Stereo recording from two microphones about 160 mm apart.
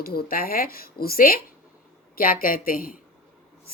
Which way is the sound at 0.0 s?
70° left (ahead or behind).